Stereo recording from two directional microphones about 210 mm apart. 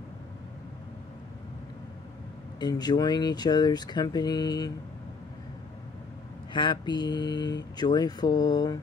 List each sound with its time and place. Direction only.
2.6 s speech: 20° left (ahead or behind)
6.5 s speech: 20° left (ahead or behind)